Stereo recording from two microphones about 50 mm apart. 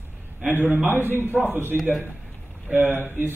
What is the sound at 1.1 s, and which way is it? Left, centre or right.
Speech, right.